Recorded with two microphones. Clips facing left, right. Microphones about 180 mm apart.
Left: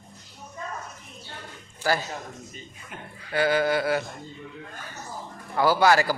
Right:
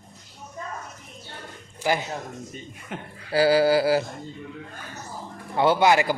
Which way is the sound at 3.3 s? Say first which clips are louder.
Right 4 dB; 30° right (ahead or behind).